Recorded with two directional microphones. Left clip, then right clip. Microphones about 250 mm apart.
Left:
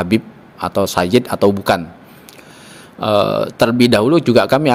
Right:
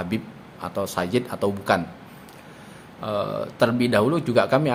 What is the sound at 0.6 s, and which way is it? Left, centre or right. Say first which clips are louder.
Speech: left 10 dB; left.